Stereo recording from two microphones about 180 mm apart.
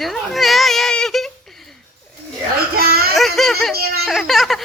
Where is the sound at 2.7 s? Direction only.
55° right (ahead or behind).